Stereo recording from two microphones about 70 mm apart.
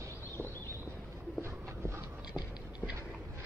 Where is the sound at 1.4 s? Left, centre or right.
Right.